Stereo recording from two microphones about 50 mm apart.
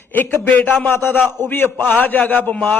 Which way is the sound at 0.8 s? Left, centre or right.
Left.